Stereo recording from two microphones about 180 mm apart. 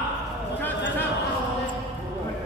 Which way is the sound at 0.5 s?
10° left (ahead or behind).